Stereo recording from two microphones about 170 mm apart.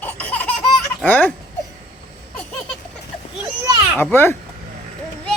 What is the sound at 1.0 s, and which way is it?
Speech, 10° left (ahead or behind).